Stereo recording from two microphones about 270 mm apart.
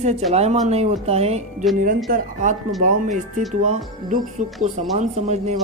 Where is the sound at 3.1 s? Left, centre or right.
Centre.